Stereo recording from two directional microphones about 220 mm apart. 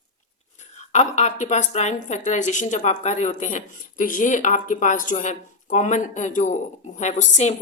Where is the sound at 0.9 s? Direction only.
30° left (ahead or behind).